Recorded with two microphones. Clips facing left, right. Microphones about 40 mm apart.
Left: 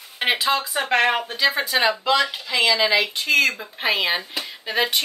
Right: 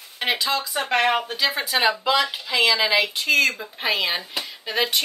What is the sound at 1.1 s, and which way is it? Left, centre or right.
Speech, centre.